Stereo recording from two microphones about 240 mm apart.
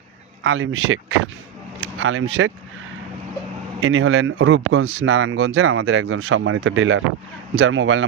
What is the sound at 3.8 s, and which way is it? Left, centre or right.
Speech, right.